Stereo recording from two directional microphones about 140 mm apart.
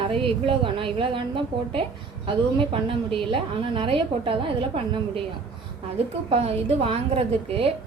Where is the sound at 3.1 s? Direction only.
40° right (ahead or behind).